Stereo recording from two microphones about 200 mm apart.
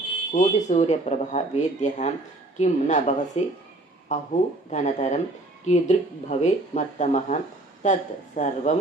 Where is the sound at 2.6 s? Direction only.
35° left (ahead or behind).